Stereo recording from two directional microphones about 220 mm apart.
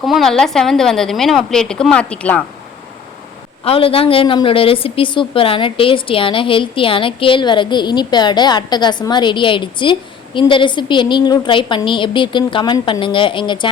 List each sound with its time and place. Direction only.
0.0 s a woman's voice: centre (ahead or behind)
3.6 s a woman's voice: 25° left (ahead or behind)